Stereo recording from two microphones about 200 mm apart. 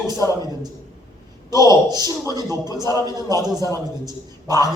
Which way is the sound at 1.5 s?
20° right (ahead or behind).